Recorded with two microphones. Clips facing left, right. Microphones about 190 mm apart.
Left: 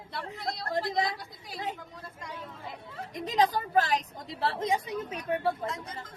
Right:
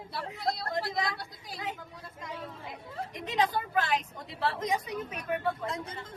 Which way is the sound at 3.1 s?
35° left (ahead or behind).